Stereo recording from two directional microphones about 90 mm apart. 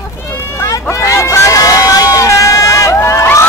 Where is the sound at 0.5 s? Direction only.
30° left (ahead or behind).